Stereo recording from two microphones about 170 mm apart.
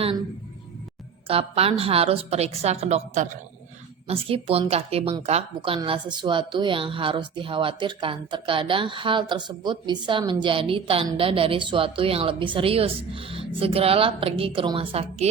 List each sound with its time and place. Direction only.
1.3 s a woman's voice: 35° right (ahead or behind)